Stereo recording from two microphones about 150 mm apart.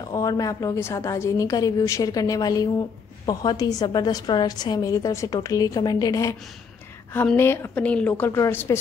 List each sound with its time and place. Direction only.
0.1 s a woman's voice: 25° left (ahead or behind)
7.3 s a woman's voice: 15° left (ahead or behind)